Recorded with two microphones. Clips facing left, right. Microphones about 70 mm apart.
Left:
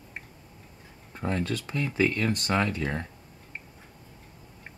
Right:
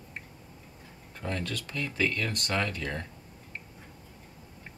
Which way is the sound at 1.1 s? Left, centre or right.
Left.